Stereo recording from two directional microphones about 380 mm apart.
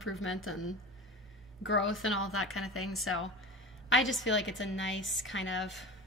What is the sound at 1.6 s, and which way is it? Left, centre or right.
A woman's voice, left.